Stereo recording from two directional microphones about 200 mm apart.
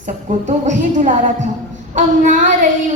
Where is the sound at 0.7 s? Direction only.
40° right (ahead or behind).